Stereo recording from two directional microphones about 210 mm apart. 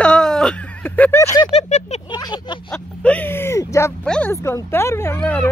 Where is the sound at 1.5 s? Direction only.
30° left (ahead or behind).